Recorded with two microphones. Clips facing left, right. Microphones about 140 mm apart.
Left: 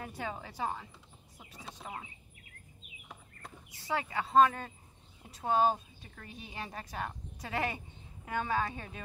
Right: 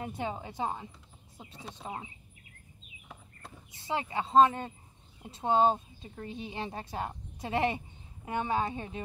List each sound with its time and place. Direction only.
0.0 s a woman's voice: 20° right (ahead or behind)
3.7 s a woman's voice: 25° right (ahead or behind)